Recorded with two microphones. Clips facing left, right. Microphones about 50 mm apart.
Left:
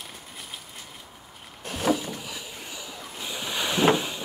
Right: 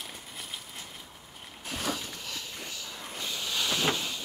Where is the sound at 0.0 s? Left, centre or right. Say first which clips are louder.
Left 1 dB; centre.